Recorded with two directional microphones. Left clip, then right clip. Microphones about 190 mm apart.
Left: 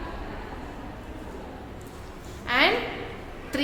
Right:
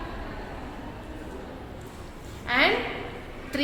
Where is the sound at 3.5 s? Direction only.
10° left (ahead or behind).